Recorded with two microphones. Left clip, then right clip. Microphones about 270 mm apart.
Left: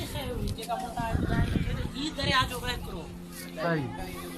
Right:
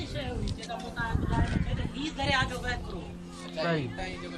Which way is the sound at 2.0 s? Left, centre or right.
Centre.